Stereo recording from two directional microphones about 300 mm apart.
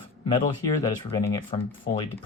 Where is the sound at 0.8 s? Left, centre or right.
Centre.